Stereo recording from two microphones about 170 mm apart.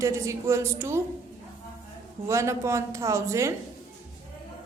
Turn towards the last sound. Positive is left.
turn(degrees=-15)  # may be behind; listen again after turning